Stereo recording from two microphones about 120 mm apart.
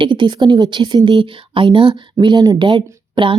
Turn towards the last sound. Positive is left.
turn(degrees=-45)  # may be behind; listen again after turning